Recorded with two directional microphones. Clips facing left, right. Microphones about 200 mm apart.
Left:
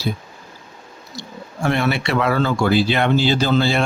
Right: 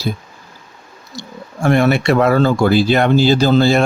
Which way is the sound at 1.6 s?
45° right (ahead or behind).